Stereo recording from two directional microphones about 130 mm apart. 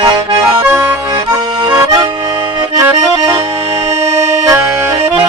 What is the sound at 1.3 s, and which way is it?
Accordion, 35° right (ahead or behind).